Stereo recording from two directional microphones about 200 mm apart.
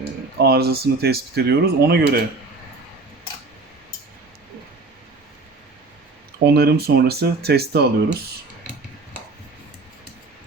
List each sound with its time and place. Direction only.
0.3 s speech: 55° right (ahead or behind)
6.4 s speech: 50° right (ahead or behind)